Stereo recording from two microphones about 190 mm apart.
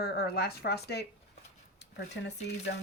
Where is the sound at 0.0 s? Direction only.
55° left (ahead or behind).